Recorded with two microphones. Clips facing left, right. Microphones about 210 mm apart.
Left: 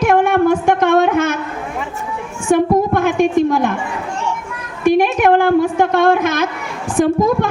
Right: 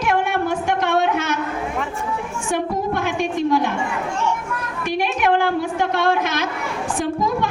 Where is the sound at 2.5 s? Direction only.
50° left (ahead or behind).